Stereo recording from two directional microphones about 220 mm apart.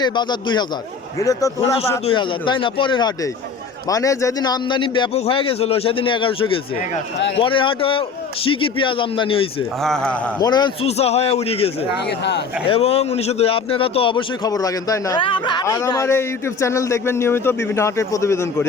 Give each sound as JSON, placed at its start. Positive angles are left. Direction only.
{"t": 0.0, "sound": "a man's voice", "side_deg": 20}
{"t": 9.8, "sound": "speech", "side_deg": 5}
{"t": 10.4, "sound": "a man's voice", "side_deg": 20}